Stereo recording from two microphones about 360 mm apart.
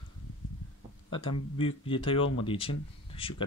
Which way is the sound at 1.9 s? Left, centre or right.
Centre.